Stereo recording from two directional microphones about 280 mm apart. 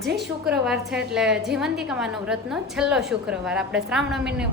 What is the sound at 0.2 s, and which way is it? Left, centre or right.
A woman's voice, centre.